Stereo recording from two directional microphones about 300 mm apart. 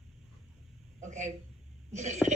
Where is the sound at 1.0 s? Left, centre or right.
Right.